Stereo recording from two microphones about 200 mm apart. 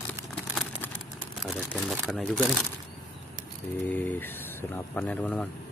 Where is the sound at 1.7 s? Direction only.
Centre (ahead or behind).